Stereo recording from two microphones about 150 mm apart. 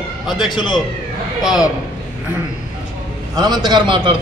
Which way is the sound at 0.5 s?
30° left (ahead or behind).